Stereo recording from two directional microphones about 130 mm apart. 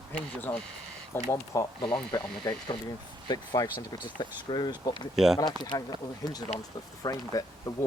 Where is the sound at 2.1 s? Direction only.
35° left (ahead or behind).